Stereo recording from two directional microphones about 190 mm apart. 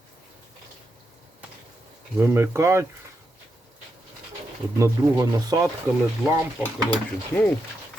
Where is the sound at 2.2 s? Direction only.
15° right (ahead or behind).